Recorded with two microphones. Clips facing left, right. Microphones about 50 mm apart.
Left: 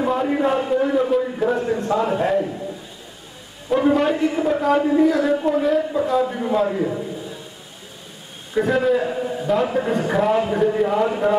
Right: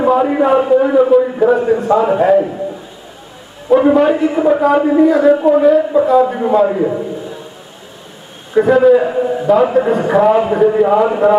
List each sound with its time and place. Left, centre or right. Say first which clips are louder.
0.0 s a sound: right 8 dB; centre
1.2 s a man's voice: right 9 dB; centre
3.6 s a man's voice: right 8 dB; centre
8.5 s a man's voice: right 9 dB; centre